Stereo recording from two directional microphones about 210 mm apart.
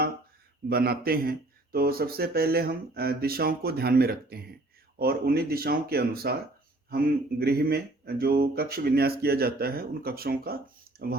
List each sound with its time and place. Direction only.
0.7 s speech: 45° right (ahead or behind)